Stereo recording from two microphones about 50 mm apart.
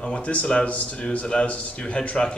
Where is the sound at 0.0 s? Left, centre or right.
Left.